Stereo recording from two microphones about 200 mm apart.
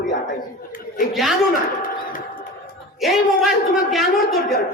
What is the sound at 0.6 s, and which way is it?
Speech, 45° left (ahead or behind).